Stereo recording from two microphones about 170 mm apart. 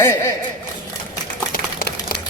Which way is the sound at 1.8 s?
75° left (ahead or behind).